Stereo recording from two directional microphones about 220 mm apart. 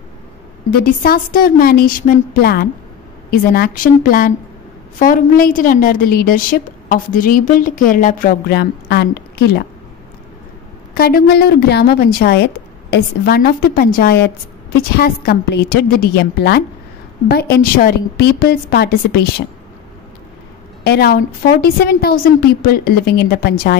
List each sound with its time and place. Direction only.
0.7 s a woman's voice: 40° left (ahead or behind)
11.0 s a woman's voice: 45° left (ahead or behind)
20.8 s a woman's voice: 45° left (ahead or behind)